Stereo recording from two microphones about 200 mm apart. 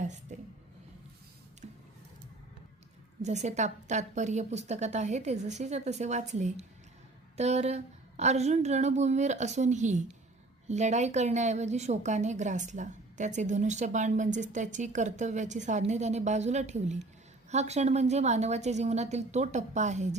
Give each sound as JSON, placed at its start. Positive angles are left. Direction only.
{"t": 0.0, "sound": "a sound", "side_deg": -35}
{"t": 1.6, "sound": "music", "side_deg": -35}
{"t": 3.2, "sound": "a woman's voice", "side_deg": -35}